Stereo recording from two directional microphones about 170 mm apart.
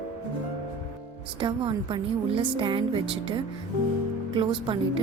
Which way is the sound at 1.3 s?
30° right (ahead or behind).